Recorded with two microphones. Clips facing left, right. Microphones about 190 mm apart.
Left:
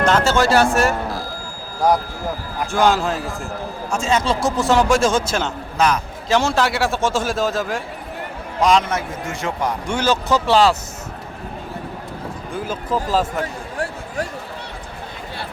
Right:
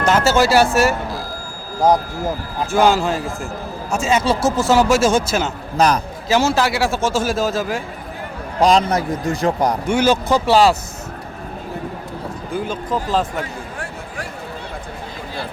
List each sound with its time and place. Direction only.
0.0 s speech: 5° right (ahead or behind)
2.6 s a man's voice: centre (ahead or behind)
5.7 s speech: 35° right (ahead or behind)
6.2 s a man's voice: 5° right (ahead or behind)
8.6 s speech: 35° right (ahead or behind)
9.8 s speech: 10° right (ahead or behind)
12.5 s a man's voice: 5° left (ahead or behind)